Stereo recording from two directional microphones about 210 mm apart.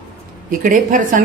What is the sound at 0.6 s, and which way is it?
Speech, 40° right (ahead or behind).